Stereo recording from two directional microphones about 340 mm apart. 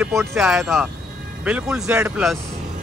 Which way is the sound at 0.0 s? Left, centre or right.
Centre.